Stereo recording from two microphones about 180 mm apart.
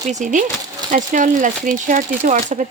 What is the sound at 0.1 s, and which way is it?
Speech, 45° right (ahead or behind).